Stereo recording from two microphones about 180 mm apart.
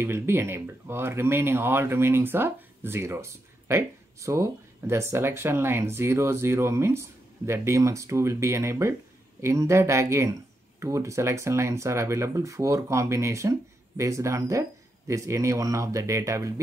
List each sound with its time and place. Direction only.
0.0 s speech: 15° right (ahead or behind)